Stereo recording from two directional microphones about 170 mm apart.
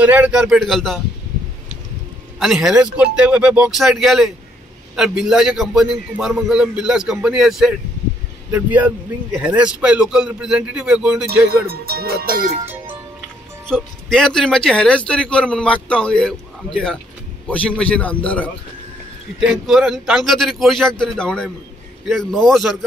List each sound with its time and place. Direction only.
0.0 s speech: 10° right (ahead or behind)
2.3 s speech: centre (ahead or behind)
11.4 s speech: 65° right (ahead or behind)
13.7 s a man's voice: 5° left (ahead or behind)